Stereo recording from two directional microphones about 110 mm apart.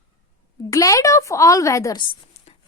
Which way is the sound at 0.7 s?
30° left (ahead or behind).